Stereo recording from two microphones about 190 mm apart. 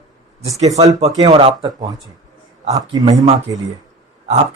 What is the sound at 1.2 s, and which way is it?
Speech, 25° right (ahead or behind).